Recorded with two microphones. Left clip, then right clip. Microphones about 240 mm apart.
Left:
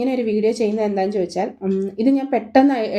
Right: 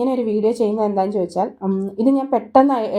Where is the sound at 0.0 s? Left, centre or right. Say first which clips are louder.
Right 1 dB; centre.